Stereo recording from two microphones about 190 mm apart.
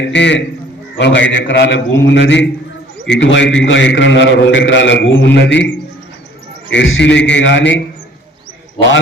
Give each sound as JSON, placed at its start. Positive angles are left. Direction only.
{"t": 0.1, "sound": "a man's voice", "side_deg": 65}
{"t": 6.7, "sound": "a man's voice", "side_deg": 80}